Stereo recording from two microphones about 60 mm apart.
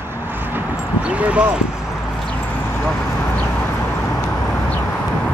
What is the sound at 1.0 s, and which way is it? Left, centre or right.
Speech, right.